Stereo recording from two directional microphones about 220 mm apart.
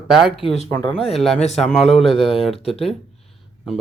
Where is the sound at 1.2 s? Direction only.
Centre (ahead or behind).